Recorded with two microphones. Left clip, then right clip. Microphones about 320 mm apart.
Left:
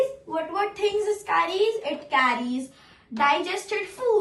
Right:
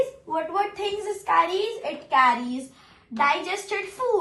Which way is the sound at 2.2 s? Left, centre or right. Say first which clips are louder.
Right 4 dB; centre.